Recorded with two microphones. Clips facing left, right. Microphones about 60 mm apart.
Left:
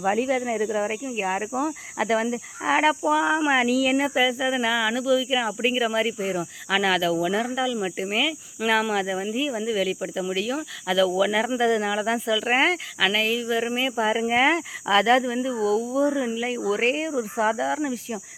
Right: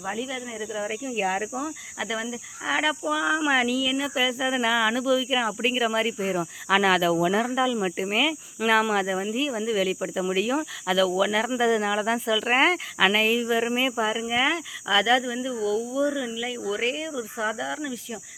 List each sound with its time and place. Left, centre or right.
0.0 s speech: left
1.0 s speech: centre
1.6 s speech: left
3.1 s speech: left
3.7 s speech: left
4.1 s speech: centre
10.8 s speech: centre
14.1 s speech: left
15.2 s speech: left
15.5 s speech: left
17.6 s speech: left